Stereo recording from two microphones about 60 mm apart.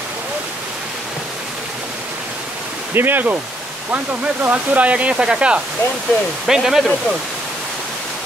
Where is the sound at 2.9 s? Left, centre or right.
Right; by 6.8 s centre.